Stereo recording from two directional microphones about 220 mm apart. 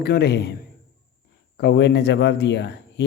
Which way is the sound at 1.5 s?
50° left (ahead or behind).